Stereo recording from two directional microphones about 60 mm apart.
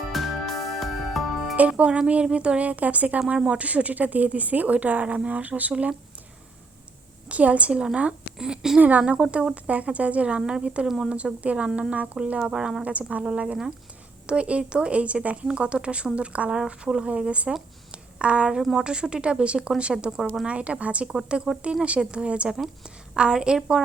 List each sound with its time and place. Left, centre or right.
0.1 s music: centre
1.5 s speech: right
7.3 s a woman's voice: right
8.4 s speech: centre
8.8 s speech: right
9.6 s speech: right
10.8 s speech: centre
11.3 s speech: right
12.9 s speech: right
17.9 s a sound: centre
18.6 s speech: centre
18.9 s speech: centre
20.5 s a woman's voice: right